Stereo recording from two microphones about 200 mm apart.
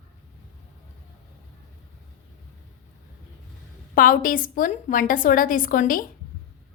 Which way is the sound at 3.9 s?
45° left (ahead or behind).